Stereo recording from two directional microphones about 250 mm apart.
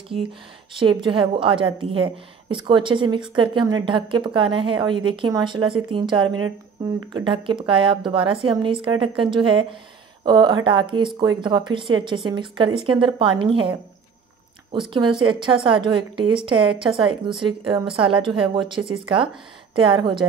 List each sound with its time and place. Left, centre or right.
0.7 s speech: centre
6.2 s speech: right
7.2 s speech: centre